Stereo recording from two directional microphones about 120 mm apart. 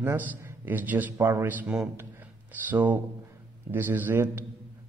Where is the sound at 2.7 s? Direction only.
15° right (ahead or behind).